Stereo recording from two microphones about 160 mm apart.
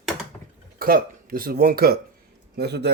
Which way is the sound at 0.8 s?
65° right (ahead or behind).